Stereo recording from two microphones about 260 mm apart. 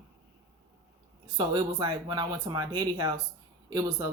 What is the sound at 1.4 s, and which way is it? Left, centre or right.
Speech, centre.